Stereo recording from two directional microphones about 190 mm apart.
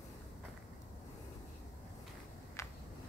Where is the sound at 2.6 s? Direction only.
15° left (ahead or behind).